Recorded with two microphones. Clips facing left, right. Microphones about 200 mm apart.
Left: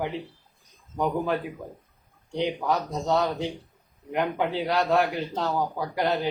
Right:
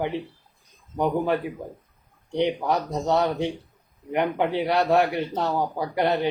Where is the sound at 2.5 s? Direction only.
15° right (ahead or behind).